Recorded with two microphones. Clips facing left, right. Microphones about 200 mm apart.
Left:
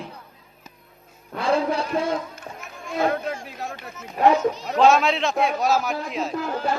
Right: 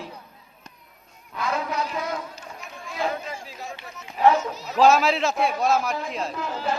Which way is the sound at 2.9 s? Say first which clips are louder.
Left 5 dB; 60° left (ahead or behind).